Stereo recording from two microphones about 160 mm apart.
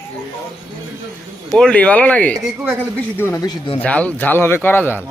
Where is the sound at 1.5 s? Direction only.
5° left (ahead or behind); by 3.8 s 30° left (ahead or behind).